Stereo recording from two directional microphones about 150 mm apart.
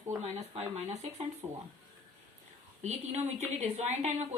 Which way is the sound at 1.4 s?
30° right (ahead or behind).